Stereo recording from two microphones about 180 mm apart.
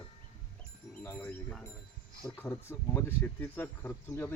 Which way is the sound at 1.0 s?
10° left (ahead or behind).